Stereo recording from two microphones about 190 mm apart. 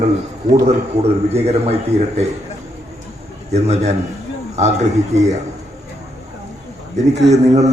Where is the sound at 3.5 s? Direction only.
35° right (ahead or behind).